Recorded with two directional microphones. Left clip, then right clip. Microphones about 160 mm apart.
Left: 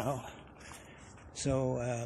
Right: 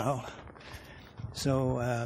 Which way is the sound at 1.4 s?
60° right (ahead or behind).